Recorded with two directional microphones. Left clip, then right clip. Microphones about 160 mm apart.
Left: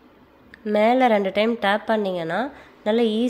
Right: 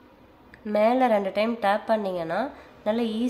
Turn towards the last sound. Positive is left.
turn(degrees=25)  # may be behind; listen again after turning